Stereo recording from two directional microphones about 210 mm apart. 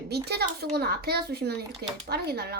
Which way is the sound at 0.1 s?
50° right (ahead or behind).